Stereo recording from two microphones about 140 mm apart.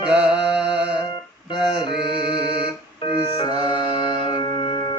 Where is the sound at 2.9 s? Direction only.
30° left (ahead or behind).